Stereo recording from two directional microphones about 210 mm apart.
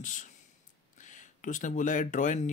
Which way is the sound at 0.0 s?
40° left (ahead or behind).